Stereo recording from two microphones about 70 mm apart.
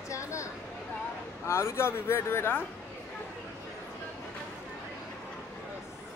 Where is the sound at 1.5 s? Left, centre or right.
Left.